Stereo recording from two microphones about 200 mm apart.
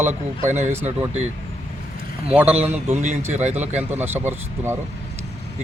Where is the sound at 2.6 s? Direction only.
10° right (ahead or behind).